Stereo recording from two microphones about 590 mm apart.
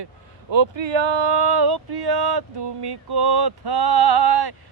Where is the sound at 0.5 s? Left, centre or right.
Right.